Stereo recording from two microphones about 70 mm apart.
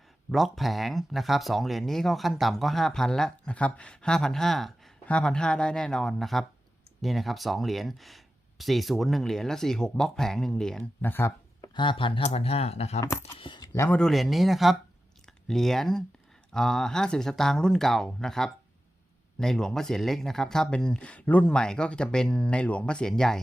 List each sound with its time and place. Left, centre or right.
0.3 s speech: centre
11.0 s speech: left
13.0 s speech: left
14.0 s speech: centre; by 21.4 s left
21.4 s speech: centre